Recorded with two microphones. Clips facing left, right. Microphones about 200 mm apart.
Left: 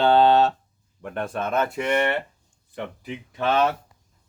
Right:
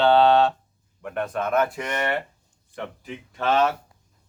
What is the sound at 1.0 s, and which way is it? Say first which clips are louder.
Speech: right 1 dB; 30° left (ahead or behind).